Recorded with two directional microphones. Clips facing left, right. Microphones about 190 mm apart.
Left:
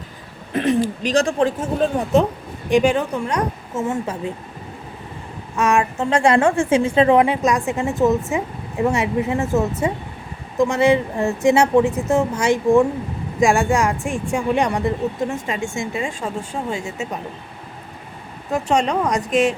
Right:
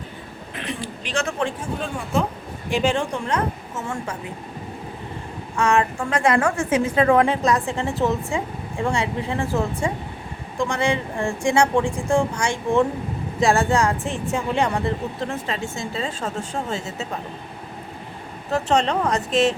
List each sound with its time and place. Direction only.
0.5 s speech: 45° left (ahead or behind)
2.6 s speech: 15° left (ahead or behind)
3.8 s a woman's voice: 25° left (ahead or behind)
5.5 s speech: 20° left (ahead or behind)
6.1 s a woman's voice: 30° left (ahead or behind); by 16.8 s 10° left (ahead or behind)
18.5 s speech: 10° left (ahead or behind)